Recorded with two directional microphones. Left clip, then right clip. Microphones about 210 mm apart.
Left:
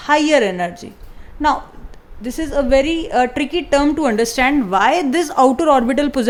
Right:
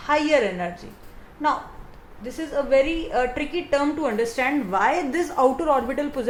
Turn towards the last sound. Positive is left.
turn(degrees=50)  # may be behind; listen again after turning